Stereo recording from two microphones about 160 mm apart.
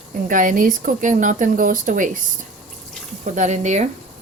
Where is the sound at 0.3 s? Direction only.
55° right (ahead or behind).